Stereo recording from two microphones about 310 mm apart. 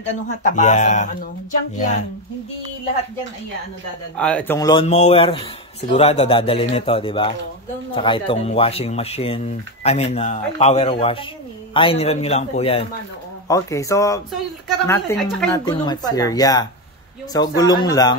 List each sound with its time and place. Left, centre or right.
0.0 s speech: left
4.2 s speech: centre